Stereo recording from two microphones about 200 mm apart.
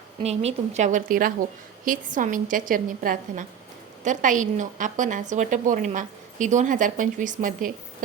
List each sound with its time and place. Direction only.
0.2 s a woman's voice: 30° right (ahead or behind)